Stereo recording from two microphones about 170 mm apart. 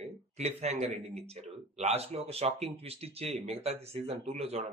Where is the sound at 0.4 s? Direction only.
40° right (ahead or behind).